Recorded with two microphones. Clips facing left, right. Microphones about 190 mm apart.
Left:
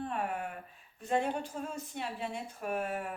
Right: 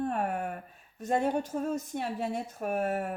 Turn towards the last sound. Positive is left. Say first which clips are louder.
# right 5 dB
turn(degrees=-45)  # may be behind; listen again after turning